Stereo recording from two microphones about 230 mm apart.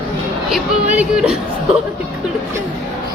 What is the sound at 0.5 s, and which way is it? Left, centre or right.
Music, centre.